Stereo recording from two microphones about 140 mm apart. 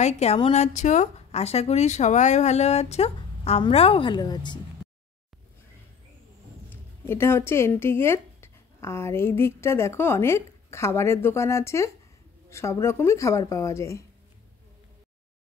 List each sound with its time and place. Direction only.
0.0 s speech: 50° left (ahead or behind); by 4.6 s 30° left (ahead or behind)
6.7 s speech: 15° left (ahead or behind)